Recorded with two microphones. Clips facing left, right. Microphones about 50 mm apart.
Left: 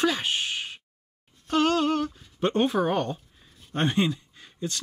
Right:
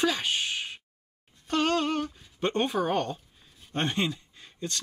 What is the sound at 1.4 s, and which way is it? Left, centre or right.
Speech, centre.